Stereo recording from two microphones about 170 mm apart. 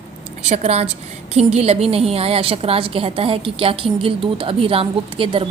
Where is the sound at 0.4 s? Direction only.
40° right (ahead or behind).